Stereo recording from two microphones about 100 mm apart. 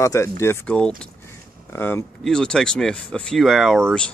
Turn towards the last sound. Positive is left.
turn(degrees=5)  # may be behind; listen again after turning